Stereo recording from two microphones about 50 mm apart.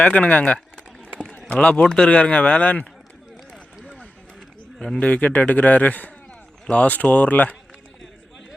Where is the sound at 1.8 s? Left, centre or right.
Centre.